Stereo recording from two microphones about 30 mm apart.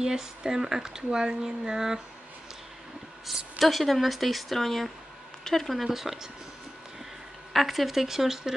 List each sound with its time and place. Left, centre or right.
0.0 s speech: right
3.5 s speech: centre
5.9 s speech: centre
7.5 s speech: centre